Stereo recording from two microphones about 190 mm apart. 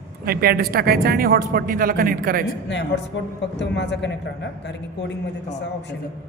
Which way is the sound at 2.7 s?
65° left (ahead or behind).